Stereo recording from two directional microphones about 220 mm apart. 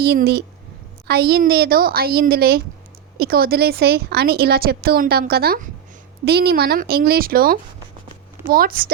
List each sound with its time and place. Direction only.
0.0 s a woman's voice: 45° right (ahead or behind)